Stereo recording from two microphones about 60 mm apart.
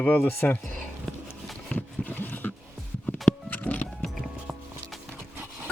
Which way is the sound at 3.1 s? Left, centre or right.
Left.